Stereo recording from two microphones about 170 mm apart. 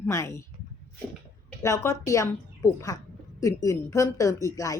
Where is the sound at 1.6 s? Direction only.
15° left (ahead or behind).